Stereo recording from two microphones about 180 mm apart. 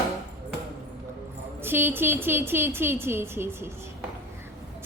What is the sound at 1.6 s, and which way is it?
A woman's voice, 10° right (ahead or behind).